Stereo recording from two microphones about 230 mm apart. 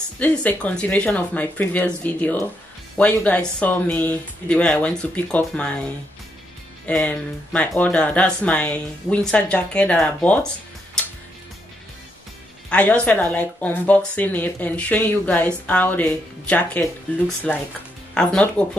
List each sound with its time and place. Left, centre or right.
0.2 s speech: centre
12.6 s speech: centre